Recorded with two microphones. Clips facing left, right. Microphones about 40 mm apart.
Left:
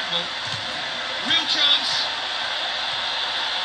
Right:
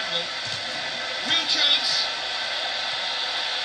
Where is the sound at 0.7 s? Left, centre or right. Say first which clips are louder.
Left 2 dB; left.